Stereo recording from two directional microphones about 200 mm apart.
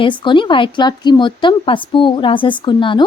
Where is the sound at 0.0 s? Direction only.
25° left (ahead or behind).